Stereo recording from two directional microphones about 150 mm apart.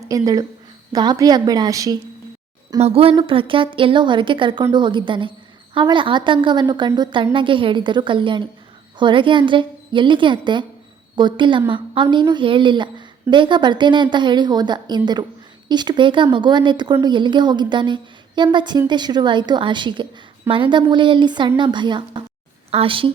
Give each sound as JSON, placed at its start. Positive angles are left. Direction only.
{"t": 0.1, "sound": "a woman's voice", "side_deg": -25}
{"t": 2.8, "sound": "a woman's voice", "side_deg": -40}